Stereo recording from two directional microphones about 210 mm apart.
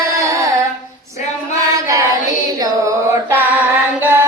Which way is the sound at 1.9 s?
15° right (ahead or behind).